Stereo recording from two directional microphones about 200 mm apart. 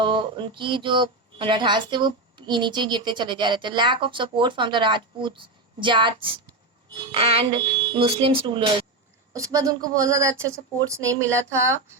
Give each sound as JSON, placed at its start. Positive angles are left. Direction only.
{"t": 0.0, "sound": "speech", "side_deg": -25}